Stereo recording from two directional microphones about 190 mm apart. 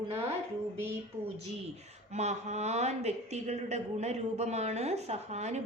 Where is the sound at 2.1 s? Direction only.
35° right (ahead or behind).